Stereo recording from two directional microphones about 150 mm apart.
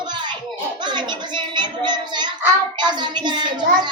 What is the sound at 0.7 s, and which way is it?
A child's voice, 30° right (ahead or behind).